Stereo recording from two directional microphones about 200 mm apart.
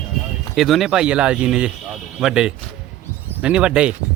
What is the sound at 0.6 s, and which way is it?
Speech, centre (ahead or behind).